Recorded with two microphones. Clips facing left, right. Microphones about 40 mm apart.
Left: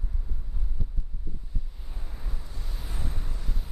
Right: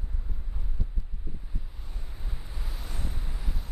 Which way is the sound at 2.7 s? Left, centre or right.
Centre.